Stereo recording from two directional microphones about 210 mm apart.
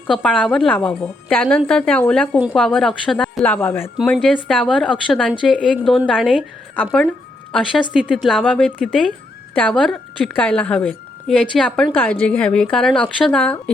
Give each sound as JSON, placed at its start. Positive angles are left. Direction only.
{"t": 0.1, "sound": "a woman's voice", "side_deg": 5}